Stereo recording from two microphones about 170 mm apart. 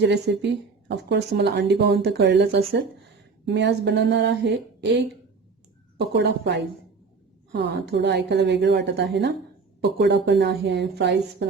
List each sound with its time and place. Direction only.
0.0 s speech: 90° right; by 2.8 s 70° right (ahead or behind)
3.4 s a woman's voice: 90° right
6.1 s speech: 85° right